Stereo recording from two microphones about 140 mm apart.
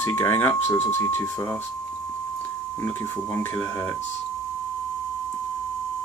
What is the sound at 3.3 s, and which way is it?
Speech, 15° left (ahead or behind).